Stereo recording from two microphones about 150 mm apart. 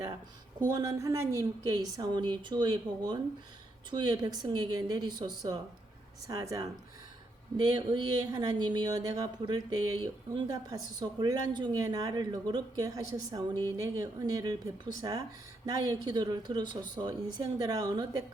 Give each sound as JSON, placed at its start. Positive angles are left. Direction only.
{"t": 0.7, "sound": "speech", "side_deg": -25}